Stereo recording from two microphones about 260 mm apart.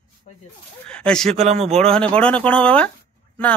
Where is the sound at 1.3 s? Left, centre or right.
Right.